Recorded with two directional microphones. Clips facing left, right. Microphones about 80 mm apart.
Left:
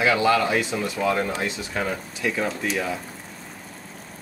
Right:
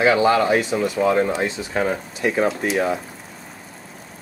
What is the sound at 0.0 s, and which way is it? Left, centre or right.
Speech, right.